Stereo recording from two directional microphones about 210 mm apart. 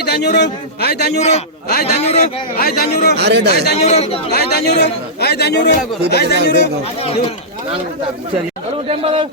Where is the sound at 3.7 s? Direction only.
30° left (ahead or behind).